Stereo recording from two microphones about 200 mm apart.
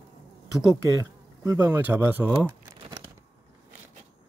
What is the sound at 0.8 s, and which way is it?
Speech, 15° right (ahead or behind).